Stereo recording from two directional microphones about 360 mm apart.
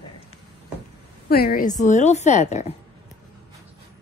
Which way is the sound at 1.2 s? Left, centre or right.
Left.